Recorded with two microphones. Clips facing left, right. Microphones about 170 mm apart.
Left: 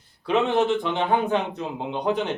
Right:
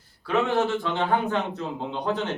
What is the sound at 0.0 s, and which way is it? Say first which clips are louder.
A man's voice: left 2 dB; 20° left (ahead or behind).